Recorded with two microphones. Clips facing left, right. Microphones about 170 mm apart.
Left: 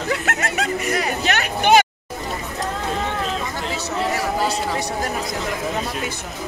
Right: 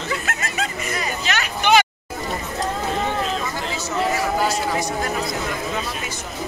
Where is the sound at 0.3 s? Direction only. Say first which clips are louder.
Left 4 dB; 70° left (ahead or behind); by 1.9 s 50° left (ahead or behind).